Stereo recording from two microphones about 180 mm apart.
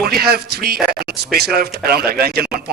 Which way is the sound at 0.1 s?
60° right (ahead or behind).